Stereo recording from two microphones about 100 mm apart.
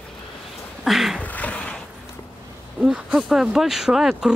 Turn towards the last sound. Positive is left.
turn(degrees=-5)  # may be behind; listen again after turning